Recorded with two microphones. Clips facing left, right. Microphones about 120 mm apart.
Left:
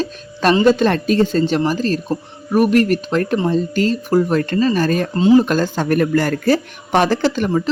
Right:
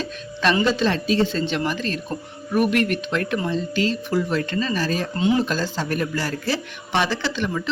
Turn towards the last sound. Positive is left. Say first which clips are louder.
# left 8 dB
turn(degrees=40)  # may be behind; listen again after turning